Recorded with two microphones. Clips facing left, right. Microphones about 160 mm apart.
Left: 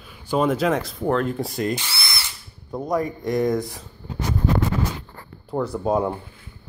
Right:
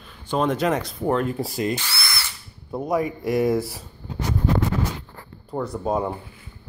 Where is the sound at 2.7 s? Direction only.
5° right (ahead or behind).